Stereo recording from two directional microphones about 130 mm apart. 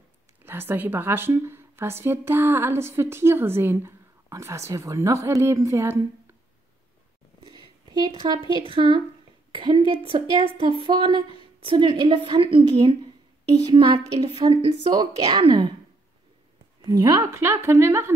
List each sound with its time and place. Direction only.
0.5 s a woman's voice: 15° right (ahead or behind)
7.4 s a sound: 40° right (ahead or behind)
8.2 s a woman's voice: 35° right (ahead or behind)
13.7 s a woman's voice: 30° right (ahead or behind)
16.8 s a woman's voice: 30° right (ahead or behind)